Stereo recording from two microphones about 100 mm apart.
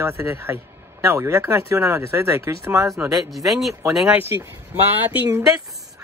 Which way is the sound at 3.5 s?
Centre (ahead or behind).